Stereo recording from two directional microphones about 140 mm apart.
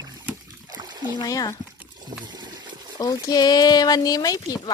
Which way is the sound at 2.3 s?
30° right (ahead or behind).